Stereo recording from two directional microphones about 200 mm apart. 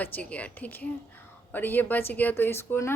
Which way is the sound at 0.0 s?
5° left (ahead or behind).